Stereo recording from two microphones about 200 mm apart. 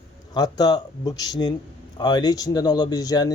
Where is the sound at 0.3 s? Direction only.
20° left (ahead or behind).